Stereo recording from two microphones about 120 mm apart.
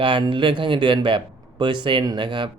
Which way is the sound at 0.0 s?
45° right (ahead or behind).